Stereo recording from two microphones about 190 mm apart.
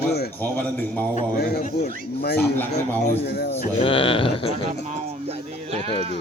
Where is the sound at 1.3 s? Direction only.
55° left (ahead or behind).